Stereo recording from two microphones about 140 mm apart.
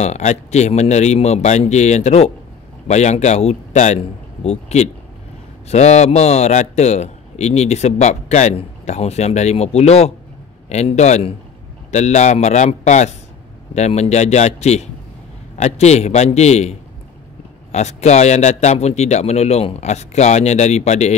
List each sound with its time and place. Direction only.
0.0 s a man's voice: 55° left (ahead or behind)